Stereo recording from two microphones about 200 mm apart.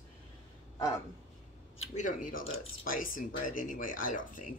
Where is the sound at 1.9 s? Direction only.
40° left (ahead or behind).